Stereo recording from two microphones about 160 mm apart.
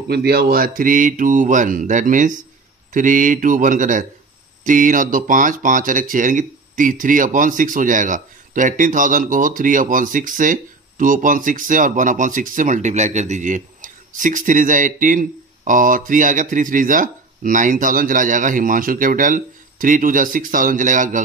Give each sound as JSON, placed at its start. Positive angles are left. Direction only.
{"t": 0.1, "sound": "speech", "side_deg": -80}